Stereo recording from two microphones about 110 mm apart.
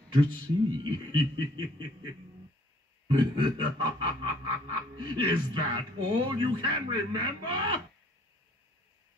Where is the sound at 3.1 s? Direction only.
50° right (ahead or behind).